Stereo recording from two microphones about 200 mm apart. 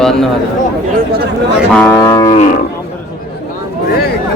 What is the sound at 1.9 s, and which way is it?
Cattle, 15° left (ahead or behind).